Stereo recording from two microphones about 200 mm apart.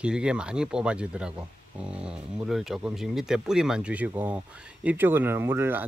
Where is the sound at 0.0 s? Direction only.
5° right (ahead or behind).